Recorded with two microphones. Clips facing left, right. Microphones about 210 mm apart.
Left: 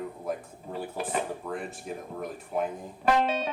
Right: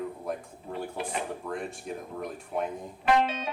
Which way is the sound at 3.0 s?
40° left (ahead or behind).